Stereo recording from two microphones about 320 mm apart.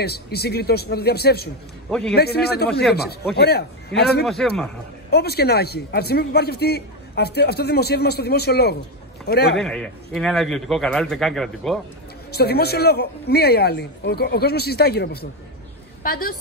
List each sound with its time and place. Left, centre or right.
0.0 s speech: left
1.9 s a man's voice: centre
2.1 s a man's voice: left
4.2 s a man's voice: centre
5.1 s a man's voice: left
9.6 s a man's voice: centre
12.3 s speech: left